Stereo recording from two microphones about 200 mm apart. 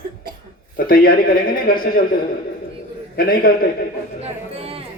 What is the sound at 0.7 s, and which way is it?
A man's voice, 45° left (ahead or behind).